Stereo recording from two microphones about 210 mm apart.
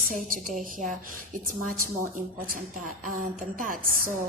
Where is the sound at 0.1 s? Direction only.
40° right (ahead or behind).